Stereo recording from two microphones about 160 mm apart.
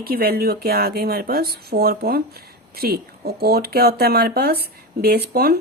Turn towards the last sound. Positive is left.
turn(degrees=-75)  # may be behind; listen again after turning